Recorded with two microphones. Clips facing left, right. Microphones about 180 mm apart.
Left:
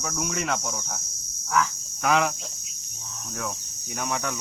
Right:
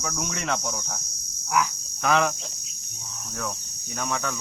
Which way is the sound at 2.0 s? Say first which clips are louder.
Even; 5° left (ahead or behind).